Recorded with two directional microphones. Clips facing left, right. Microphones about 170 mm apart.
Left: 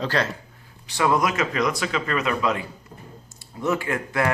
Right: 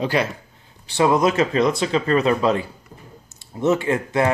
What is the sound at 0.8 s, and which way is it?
Speech, 25° right (ahead or behind).